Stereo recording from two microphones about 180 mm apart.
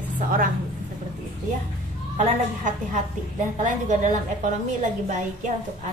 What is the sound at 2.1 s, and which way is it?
A woman's voice, 40° right (ahead or behind).